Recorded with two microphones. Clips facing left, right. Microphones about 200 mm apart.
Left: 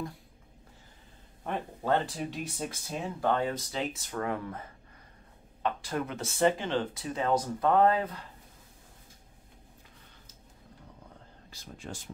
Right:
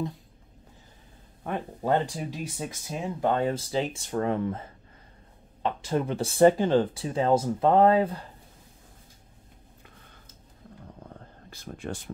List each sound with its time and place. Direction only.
1.8 s speech: 15° right (ahead or behind); by 8.2 s 30° right (ahead or behind)
11.5 s speech: 55° right (ahead or behind)